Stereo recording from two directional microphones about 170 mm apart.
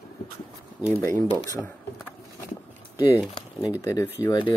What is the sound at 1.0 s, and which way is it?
Speech, 15° left (ahead or behind).